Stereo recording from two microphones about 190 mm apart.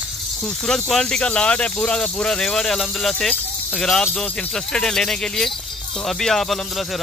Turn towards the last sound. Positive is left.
turn(degrees=0)  # may be behind; listen again after turning